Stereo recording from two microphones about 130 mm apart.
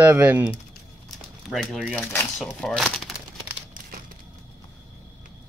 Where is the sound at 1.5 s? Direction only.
Centre (ahead or behind).